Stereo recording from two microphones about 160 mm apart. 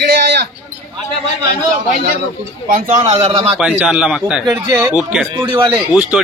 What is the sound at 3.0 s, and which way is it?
Speech, 40° right (ahead or behind).